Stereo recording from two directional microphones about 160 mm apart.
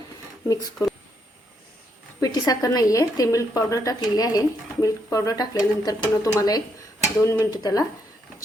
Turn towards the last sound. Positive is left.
turn(degrees=25)  # may be behind; listen again after turning